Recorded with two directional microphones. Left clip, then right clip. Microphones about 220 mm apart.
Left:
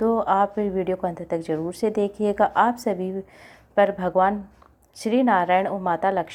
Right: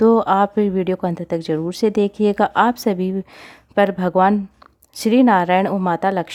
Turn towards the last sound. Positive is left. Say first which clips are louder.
# right 3 dB
turn(degrees=-45)  # may be behind; listen again after turning